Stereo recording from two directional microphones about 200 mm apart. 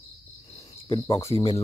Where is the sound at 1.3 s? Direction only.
25° left (ahead or behind).